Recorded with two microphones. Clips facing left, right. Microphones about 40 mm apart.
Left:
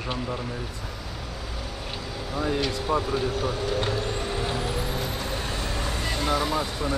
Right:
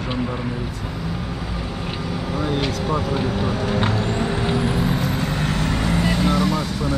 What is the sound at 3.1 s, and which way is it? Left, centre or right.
Speech, right.